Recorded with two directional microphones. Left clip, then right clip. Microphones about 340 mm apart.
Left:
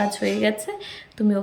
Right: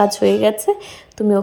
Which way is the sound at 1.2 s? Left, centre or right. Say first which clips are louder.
Right 7 dB; right.